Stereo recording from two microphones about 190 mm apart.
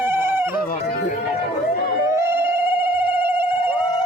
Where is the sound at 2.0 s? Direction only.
15° right (ahead or behind).